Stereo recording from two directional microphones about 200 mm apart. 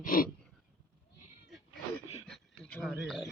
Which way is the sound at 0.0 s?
45° left (ahead or behind).